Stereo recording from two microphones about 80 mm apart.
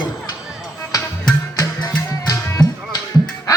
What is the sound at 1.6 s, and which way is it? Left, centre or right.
Music, left.